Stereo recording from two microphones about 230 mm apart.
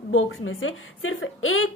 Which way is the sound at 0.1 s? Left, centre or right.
Left.